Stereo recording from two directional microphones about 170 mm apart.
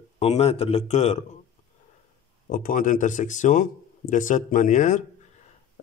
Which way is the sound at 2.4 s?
55° left (ahead or behind).